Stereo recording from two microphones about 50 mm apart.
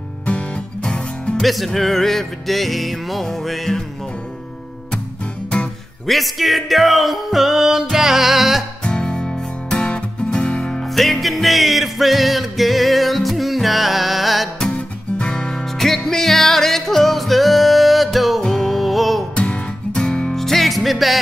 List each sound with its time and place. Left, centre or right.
0.2 s music: left
1.3 s music: centre
6.0 s music: centre
8.8 s music: centre
11.0 s music: centre
14.7 s music: left; by 19.2 s centre
19.3 s music: left
20.3 s music: centre